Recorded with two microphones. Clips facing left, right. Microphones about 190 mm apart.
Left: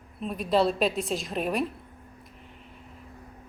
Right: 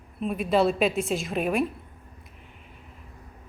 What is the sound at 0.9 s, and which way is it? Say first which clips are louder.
Speech: right 3 dB; 45° right (ahead or behind).